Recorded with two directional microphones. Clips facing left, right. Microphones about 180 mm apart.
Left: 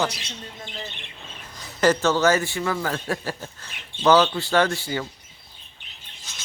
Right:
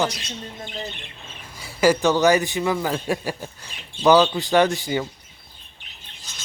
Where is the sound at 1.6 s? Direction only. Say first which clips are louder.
Right 2 dB; 10° right (ahead or behind).